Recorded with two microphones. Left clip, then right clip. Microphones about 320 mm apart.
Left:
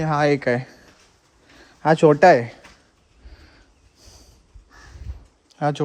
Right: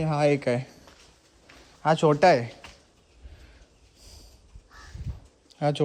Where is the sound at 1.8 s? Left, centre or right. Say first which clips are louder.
Left 6 dB; left.